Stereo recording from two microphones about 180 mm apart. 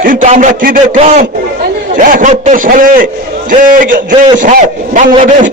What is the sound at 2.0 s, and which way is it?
A man's voice, 50° right (ahead or behind).